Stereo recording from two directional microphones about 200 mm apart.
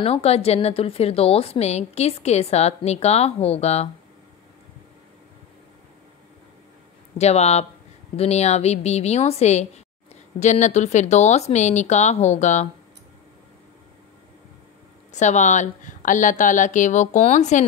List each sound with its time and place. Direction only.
0.0 s a woman's voice: 30° left (ahead or behind)
7.2 s a woman's voice: 35° left (ahead or behind)
15.1 s a woman's voice: 35° left (ahead or behind)